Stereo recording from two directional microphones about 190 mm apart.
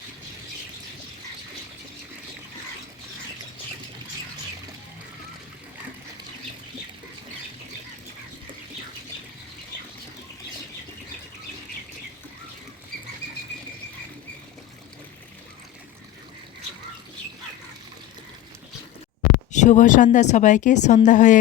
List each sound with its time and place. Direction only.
19.5 s speech: 40° left (ahead or behind)